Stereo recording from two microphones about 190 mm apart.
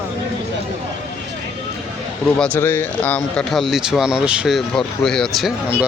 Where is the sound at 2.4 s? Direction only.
10° left (ahead or behind).